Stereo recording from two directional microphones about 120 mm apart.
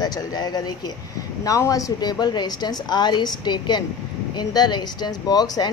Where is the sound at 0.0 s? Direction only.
35° left (ahead or behind).